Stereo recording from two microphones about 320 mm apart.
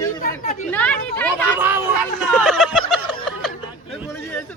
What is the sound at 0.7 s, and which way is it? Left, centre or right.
Speech, centre.